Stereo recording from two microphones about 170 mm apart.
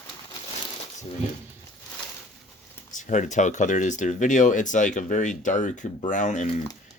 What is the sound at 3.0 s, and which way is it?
Speech, 45° left (ahead or behind).